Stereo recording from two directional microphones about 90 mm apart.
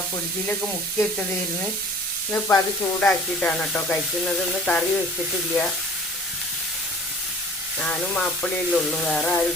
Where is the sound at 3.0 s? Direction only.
10° left (ahead or behind).